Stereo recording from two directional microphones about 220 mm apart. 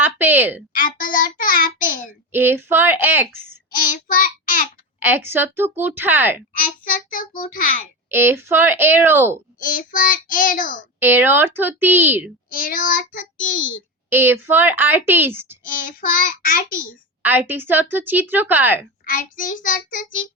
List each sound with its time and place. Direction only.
0.0 s a woman's voice: 10° right (ahead or behind)
0.8 s child singing: 40° left (ahead or behind)
2.3 s a woman's voice: 10° right (ahead or behind)
3.7 s child singing: 40° left (ahead or behind)
4.9 s a woman's voice: 10° right (ahead or behind)
6.8 s child singing: 40° left (ahead or behind)
8.1 s a woman's voice: 10° right (ahead or behind)
9.6 s child singing: 40° left (ahead or behind)
11.0 s a woman's voice: 10° right (ahead or behind)
12.5 s child singing: 40° left (ahead or behind)
14.1 s a woman's voice: 10° right (ahead or behind)
15.6 s child singing: 40° left (ahead or behind)
17.2 s a woman's voice: 10° right (ahead or behind)
19.0 s child singing: 40° left (ahead or behind)